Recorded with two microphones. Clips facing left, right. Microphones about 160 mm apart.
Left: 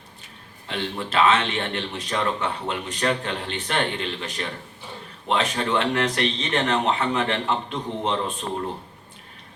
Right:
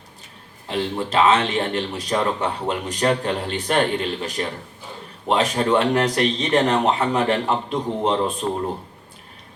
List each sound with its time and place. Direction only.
0.7 s speech: 35° right (ahead or behind)